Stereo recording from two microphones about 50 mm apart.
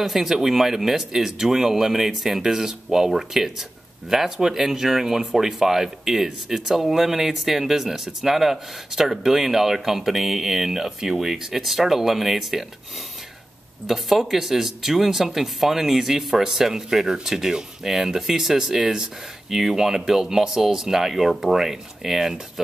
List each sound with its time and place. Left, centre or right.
0.0 s speech: centre
13.8 s speech: centre